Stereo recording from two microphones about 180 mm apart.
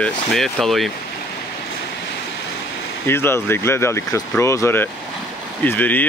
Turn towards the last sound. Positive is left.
turn(degrees=10)  # may be behind; listen again after turning